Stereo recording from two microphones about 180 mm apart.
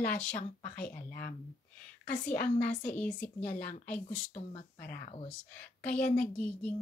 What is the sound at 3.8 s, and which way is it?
Speech, 5° left (ahead or behind).